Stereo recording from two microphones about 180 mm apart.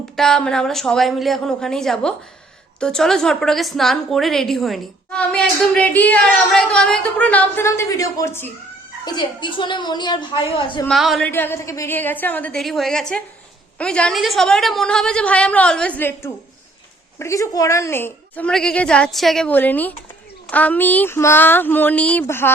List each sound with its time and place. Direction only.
0.2 s a woman's voice: 5° left (ahead or behind)
9.0 s a woman's voice: 25° left (ahead or behind)
10.8 s a woman's voice: centre (ahead or behind)
11.3 s a woman's voice: 10° left (ahead or behind)